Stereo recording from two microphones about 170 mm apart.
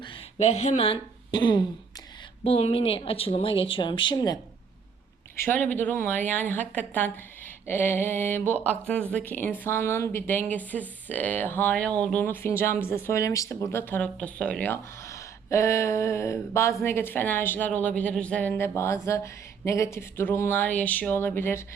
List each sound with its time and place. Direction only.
0.0 s a woman's voice: 35° left (ahead or behind)
5.4 s a woman's voice: 10° left (ahead or behind)